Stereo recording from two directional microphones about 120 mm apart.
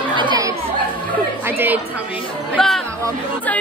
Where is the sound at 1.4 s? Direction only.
15° right (ahead or behind).